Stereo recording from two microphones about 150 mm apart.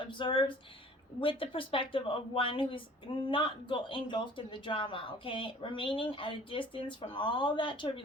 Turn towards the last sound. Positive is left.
turn(degrees=35)  # may be behind; listen again after turning